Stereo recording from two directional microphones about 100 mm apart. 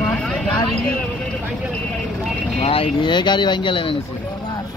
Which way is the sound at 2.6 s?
70° left (ahead or behind).